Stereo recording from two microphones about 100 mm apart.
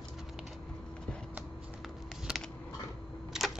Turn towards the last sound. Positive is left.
turn(degrees=-5)  # may be behind; listen again after turning